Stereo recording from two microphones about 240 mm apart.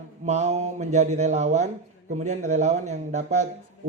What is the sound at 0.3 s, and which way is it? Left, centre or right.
A man's voice, right.